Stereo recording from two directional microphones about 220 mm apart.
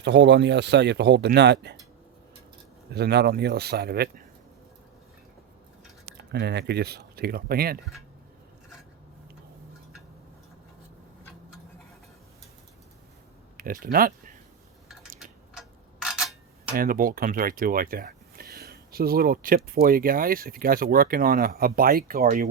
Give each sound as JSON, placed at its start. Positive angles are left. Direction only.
{"t": 0.0, "sound": "speech", "side_deg": -55}
{"t": 2.9, "sound": "speech", "side_deg": -50}
{"t": 6.1, "sound": "speech", "side_deg": -50}
{"t": 13.6, "sound": "speech", "side_deg": -40}
{"t": 15.5, "sound": "tick-tock", "side_deg": 0}
{"t": 16.7, "sound": "speech", "side_deg": -40}